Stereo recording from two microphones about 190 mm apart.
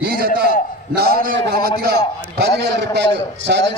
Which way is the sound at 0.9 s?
50° right (ahead or behind).